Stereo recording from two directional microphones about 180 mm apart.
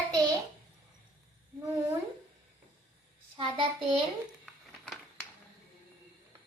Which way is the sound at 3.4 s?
30° right (ahead or behind).